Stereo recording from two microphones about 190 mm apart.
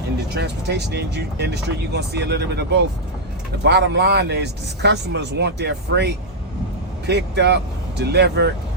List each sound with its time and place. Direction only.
0.3 s speech: 60° right (ahead or behind)